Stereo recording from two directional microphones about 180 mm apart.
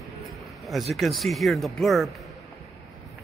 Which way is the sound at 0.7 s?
Centre (ahead or behind).